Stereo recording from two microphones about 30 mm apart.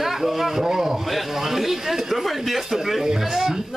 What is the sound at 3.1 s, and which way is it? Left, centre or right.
Speech, centre.